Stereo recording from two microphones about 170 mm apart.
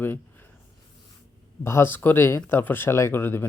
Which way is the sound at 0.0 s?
10° left (ahead or behind).